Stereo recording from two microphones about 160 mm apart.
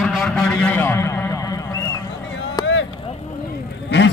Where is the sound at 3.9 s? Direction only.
90° left.